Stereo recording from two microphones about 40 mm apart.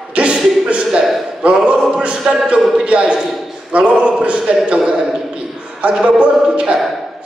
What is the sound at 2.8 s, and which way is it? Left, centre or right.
Speech, right.